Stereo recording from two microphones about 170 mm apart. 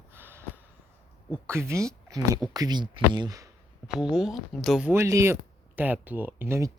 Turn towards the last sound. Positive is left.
turn(degrees=-15)  # may be behind; listen again after turning